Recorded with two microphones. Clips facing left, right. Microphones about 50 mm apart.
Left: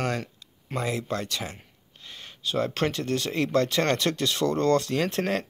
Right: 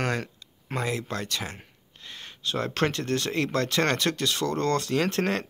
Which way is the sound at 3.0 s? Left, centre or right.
Right.